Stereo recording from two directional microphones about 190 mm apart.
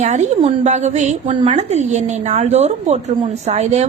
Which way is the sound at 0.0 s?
40° right (ahead or behind).